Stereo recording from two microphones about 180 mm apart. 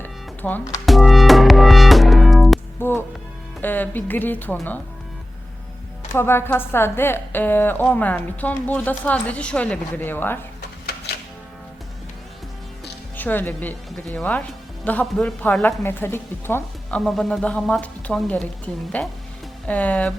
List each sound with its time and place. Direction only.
0.0 s music: 10° left (ahead or behind)
0.9 s music: centre (ahead or behind)
2.8 s a woman's voice: 10° left (ahead or behind)
6.1 s a woman's voice: 15° left (ahead or behind)
10.6 s a sound: 65° left (ahead or behind)
13.1 s a woman's voice: 10° left (ahead or behind)
17.0 s a woman's voice: centre (ahead or behind)